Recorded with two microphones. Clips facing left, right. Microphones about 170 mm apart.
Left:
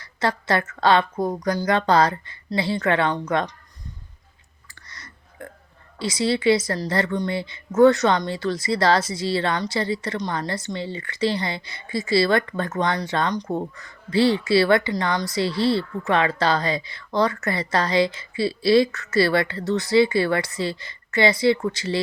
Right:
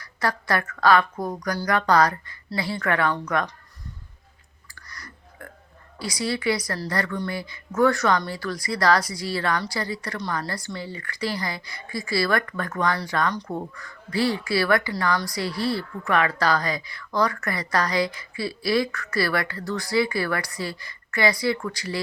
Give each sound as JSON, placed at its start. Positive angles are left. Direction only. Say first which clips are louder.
{"t": 0.0, "sound": "a woman's voice", "louder": "left 3 dB", "side_deg": 25}
{"t": 4.7, "sound": "a sound", "louder": "right 2 dB", "side_deg": 25}
{"t": 6.0, "sound": "a woman's voice", "louder": "left 5 dB", "side_deg": 25}